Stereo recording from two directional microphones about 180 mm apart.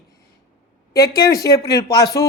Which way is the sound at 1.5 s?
20° left (ahead or behind).